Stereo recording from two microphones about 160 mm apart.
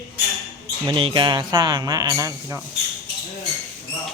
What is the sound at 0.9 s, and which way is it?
A man's voice, 30° right (ahead or behind).